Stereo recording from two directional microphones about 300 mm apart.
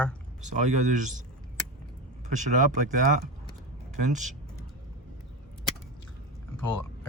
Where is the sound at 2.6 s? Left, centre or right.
Right.